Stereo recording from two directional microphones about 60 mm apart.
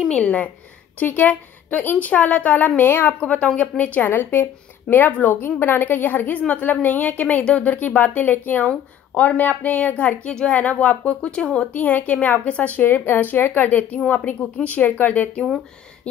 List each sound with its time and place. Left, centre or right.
0.1 s a woman's voice: left
0.9 s a woman's voice: left
3.3 s a woman's voice: centre
11.7 s a woman's voice: left